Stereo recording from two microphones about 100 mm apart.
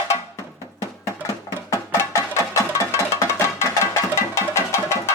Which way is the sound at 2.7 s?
30° left (ahead or behind).